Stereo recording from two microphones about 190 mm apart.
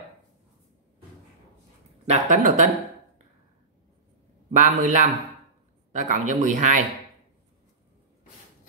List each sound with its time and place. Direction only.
2.0 s speech: 40° right (ahead or behind)
4.6 s speech: 40° right (ahead or behind)